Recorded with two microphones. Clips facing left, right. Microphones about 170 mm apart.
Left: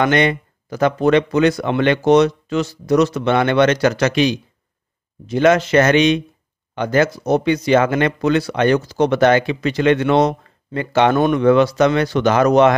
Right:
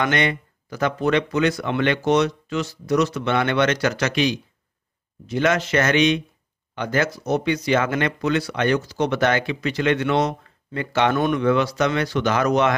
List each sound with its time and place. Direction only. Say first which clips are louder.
0.0 s speech: left 6 dB; 30° left (ahead or behind)
7.2 s speech: left 5 dB; 35° left (ahead or behind)